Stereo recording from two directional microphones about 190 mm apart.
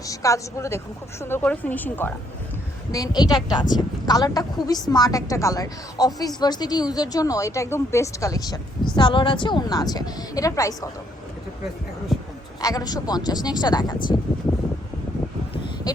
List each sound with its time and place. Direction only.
0.0 s a woman's voice: 15° left (ahead or behind)
12.6 s a woman's voice: 20° left (ahead or behind)